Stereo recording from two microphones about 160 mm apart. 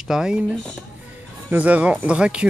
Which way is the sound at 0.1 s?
5° right (ahead or behind).